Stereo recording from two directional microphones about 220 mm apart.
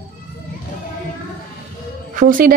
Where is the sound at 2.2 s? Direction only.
40° right (ahead or behind).